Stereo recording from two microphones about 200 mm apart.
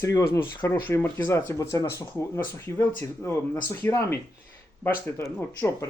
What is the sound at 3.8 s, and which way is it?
Speech, 10° left (ahead or behind).